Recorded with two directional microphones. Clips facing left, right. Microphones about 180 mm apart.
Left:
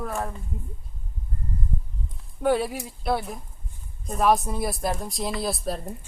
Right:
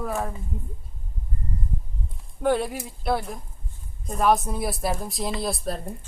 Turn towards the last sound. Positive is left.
turn(degrees=0)  # may be behind; listen again after turning